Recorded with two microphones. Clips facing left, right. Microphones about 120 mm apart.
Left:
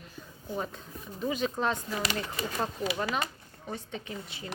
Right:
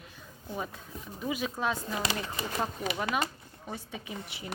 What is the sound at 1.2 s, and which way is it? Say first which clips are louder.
Speech: left 3 dB; 5° right (ahead or behind).